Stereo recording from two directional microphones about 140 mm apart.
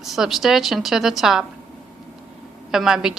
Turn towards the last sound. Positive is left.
turn(degrees=-5)  # may be behind; listen again after turning